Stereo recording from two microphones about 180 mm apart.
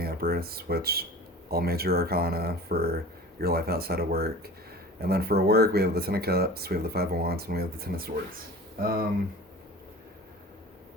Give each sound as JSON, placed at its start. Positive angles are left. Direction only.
{"t": 0.0, "sound": "speech", "side_deg": -60}